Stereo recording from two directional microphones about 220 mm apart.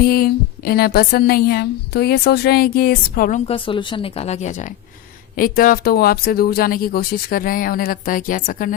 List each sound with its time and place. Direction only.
0.0 s a woman's voice: 45° left (ahead or behind)